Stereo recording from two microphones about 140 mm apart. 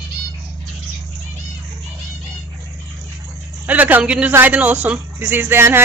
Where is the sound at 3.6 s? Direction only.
10° right (ahead or behind).